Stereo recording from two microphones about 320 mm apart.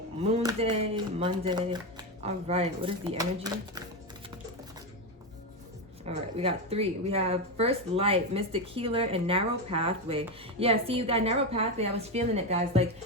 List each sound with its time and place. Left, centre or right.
0.3 s speech: centre
6.1 s speech: centre